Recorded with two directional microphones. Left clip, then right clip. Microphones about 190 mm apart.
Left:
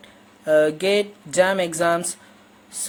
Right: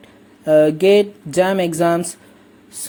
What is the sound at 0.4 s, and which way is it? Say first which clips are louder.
Speech: right 5 dB; 15° right (ahead or behind).